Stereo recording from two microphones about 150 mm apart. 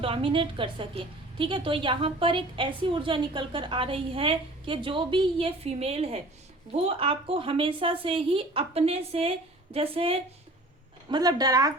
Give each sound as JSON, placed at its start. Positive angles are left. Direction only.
{"t": 0.0, "sound": "a woman's voice", "side_deg": -35}
{"t": 11.1, "sound": "speech", "side_deg": -25}